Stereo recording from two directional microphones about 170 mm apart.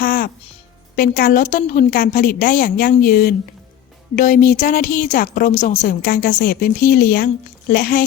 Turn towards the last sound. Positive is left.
turn(degrees=60)  # may be behind; listen again after turning